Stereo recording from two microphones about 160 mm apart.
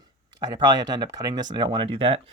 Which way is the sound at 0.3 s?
25° right (ahead or behind).